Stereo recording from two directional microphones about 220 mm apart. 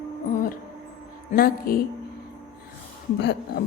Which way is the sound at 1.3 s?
40° left (ahead or behind).